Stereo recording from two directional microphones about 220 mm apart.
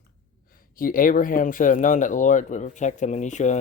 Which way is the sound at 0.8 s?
40° left (ahead or behind).